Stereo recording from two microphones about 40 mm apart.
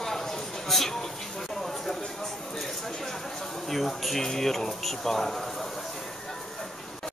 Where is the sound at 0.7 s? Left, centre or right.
Centre.